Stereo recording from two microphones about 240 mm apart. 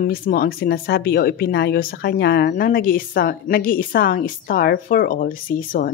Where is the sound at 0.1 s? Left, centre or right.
Left.